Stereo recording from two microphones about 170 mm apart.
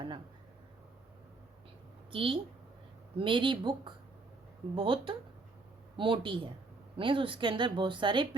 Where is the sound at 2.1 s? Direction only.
30° right (ahead or behind).